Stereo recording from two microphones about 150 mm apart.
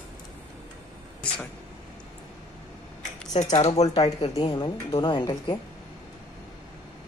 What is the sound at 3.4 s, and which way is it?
A woman's voice, 50° left (ahead or behind).